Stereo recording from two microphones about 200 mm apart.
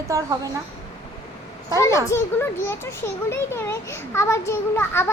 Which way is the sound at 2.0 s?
10° left (ahead or behind).